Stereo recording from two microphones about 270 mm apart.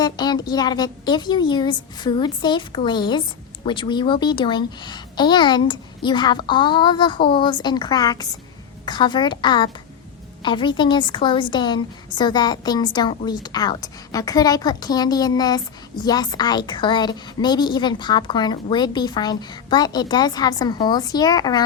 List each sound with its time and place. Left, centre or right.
0.0 s a woman's voice: centre